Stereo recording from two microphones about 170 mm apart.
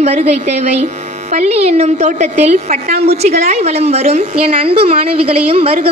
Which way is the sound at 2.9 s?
70° right (ahead or behind).